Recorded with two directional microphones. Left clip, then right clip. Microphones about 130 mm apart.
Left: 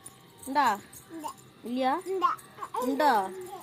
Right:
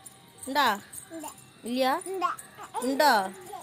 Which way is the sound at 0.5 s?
70° right (ahead or behind).